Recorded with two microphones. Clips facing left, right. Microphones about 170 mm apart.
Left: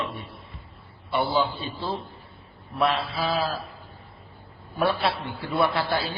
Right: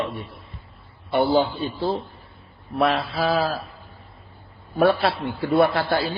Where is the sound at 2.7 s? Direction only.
35° right (ahead or behind).